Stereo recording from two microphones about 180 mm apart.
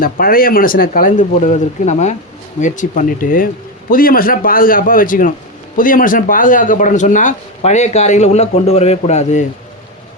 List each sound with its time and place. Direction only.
0.0 s speech: 55° left (ahead or behind); by 9.4 s 40° left (ahead or behind)